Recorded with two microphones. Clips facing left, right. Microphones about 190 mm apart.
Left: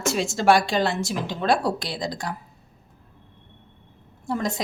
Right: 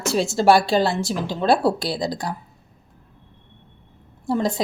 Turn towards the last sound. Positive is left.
turn(degrees=-30)  # may be behind; listen again after turning